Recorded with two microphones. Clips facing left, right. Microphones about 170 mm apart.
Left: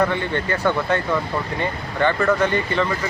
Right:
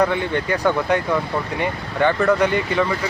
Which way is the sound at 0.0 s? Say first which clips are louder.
Right 2 dB; 15° right (ahead or behind).